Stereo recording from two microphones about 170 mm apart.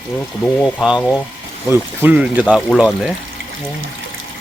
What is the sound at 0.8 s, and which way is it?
Speech, 5° right (ahead or behind).